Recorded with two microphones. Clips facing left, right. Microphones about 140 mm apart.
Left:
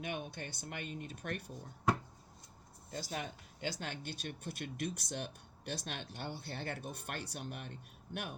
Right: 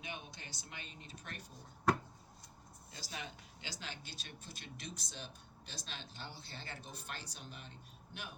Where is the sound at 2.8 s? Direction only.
50° left (ahead or behind).